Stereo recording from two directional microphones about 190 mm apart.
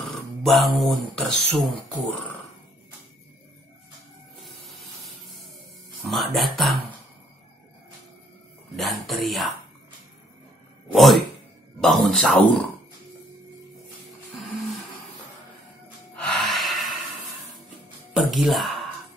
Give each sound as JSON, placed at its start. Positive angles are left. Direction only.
{"t": 0.0, "sound": "speech", "side_deg": 0}
{"t": 4.4, "sound": "spray", "side_deg": 0}
{"t": 6.0, "sound": "speech", "side_deg": 0}
{"t": 8.7, "sound": "speech", "side_deg": 0}
{"t": 10.9, "sound": "speech", "side_deg": 0}
{"t": 16.2, "sound": "gasp", "side_deg": 5}
{"t": 18.3, "sound": "speech", "side_deg": 0}